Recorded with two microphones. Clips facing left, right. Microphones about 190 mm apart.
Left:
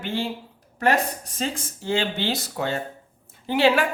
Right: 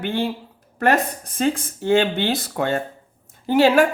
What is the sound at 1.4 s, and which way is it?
Speech, 55° right (ahead or behind).